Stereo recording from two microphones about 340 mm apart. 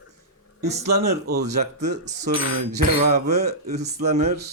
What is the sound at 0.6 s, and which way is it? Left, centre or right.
Speech, right.